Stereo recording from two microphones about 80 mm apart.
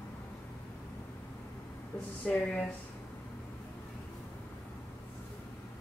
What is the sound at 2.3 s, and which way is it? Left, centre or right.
Speech, centre.